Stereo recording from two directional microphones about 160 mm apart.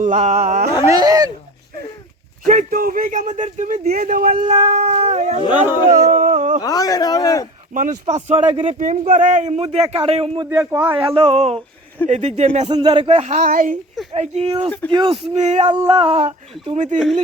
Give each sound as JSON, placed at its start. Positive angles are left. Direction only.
{"t": 0.0, "sound": "a man's voice", "side_deg": -50}
{"t": 0.9, "sound": "speech", "side_deg": -20}
{"t": 2.5, "sound": "a man's voice", "side_deg": -55}
{"t": 6.1, "sound": "a sound", "side_deg": -55}
{"t": 6.6, "sound": "a man's voice", "side_deg": 25}
{"t": 7.7, "sound": "a man's voice", "side_deg": -55}
{"t": 10.4, "sound": "speech", "side_deg": -20}
{"t": 10.9, "sound": "a man's voice", "side_deg": -30}
{"t": 12.7, "sound": "a man's voice", "side_deg": -30}
{"t": 14.1, "sound": "speech", "side_deg": -40}
{"t": 14.7, "sound": "speech", "side_deg": 10}
{"t": 14.9, "sound": "speech", "side_deg": -30}
{"t": 15.4, "sound": "a man's voice", "side_deg": -45}
{"t": 15.9, "sound": "speech", "side_deg": -35}